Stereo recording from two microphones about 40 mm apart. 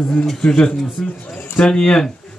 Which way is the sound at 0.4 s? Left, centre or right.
Centre.